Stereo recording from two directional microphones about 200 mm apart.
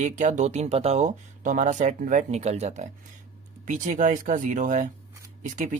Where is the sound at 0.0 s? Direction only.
40° right (ahead or behind).